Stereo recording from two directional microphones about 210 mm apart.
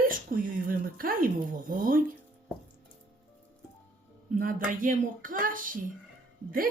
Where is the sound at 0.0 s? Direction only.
40° right (ahead or behind).